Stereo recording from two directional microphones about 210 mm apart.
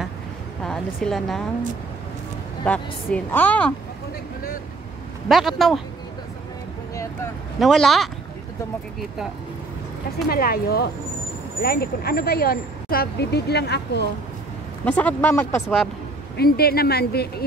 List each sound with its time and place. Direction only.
0.7 s a woman's voice: centre (ahead or behind)
2.6 s speech: 5° left (ahead or behind)
5.3 s speech: centre (ahead or behind)
7.5 s speech: centre (ahead or behind)
10.3 s speech: 45° left (ahead or behind)
14.9 s speech: 5° left (ahead or behind)
16.3 s speech: 45° left (ahead or behind)